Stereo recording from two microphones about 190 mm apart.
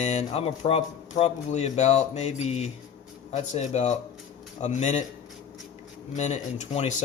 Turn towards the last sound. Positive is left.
turn(degrees=35)  # may be behind; listen again after turning